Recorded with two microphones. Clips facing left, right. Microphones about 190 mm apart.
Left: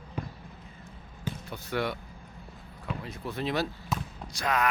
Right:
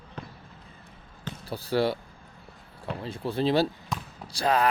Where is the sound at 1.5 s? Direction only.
30° right (ahead or behind).